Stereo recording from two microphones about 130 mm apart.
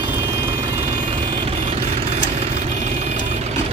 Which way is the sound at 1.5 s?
55° right (ahead or behind).